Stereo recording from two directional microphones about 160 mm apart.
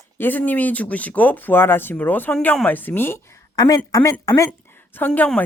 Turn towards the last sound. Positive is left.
turn(degrees=5)  # may be behind; listen again after turning